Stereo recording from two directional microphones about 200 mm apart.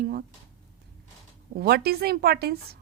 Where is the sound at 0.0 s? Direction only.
50° right (ahead or behind).